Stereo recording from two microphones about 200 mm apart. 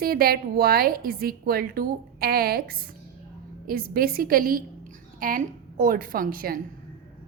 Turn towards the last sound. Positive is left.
turn(degrees=-45)  # may be behind; listen again after turning